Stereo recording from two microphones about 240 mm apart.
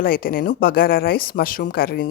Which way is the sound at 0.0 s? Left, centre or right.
Left.